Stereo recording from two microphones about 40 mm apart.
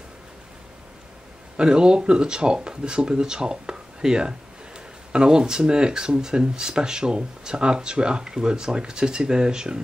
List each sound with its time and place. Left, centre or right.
1.6 s speech: right